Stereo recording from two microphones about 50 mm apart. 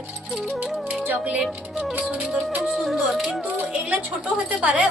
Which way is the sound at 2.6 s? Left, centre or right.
Centre.